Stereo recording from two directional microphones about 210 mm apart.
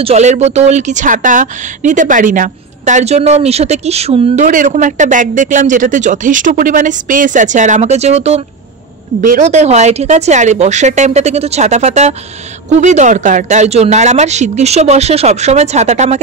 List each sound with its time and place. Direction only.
0.0 s a woman's voice: 30° right (ahead or behind)